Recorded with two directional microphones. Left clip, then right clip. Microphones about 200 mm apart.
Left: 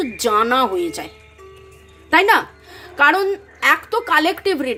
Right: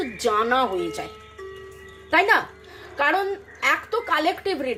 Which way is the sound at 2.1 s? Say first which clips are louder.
Left 5 dB; 40° left (ahead or behind).